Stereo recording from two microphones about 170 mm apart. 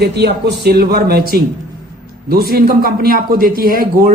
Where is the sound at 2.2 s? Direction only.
65° right (ahead or behind).